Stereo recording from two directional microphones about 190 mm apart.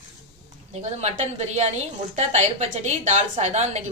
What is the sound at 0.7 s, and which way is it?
A woman's voice, 35° right (ahead or behind).